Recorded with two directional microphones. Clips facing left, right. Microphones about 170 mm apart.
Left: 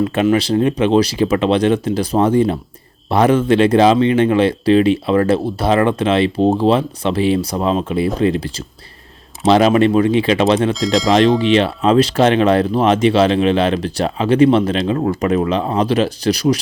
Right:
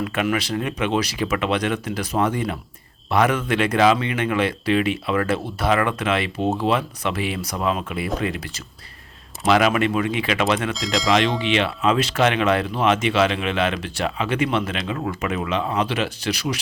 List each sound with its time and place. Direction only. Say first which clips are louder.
0.0 s speech: left 8 dB; 30° left (ahead or behind)
10.8 s speech: left 7 dB; centre (ahead or behind)
11.3 s speech: left 8 dB; 35° left (ahead or behind)